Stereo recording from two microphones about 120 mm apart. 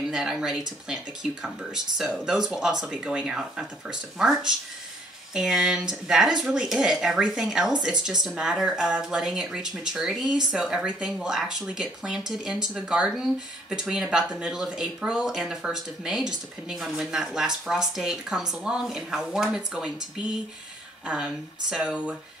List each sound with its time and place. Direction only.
0.1 s speech: 5° right (ahead or behind)